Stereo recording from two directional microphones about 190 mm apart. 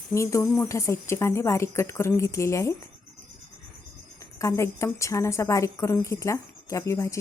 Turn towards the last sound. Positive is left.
turn(degrees=15)  # may be behind; listen again after turning